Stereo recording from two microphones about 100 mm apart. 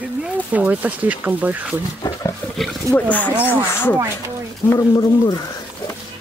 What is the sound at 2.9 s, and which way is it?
Speech, 35° right (ahead or behind).